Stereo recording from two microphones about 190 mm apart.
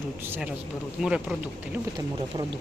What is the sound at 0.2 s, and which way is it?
Speech, 10° right (ahead or behind).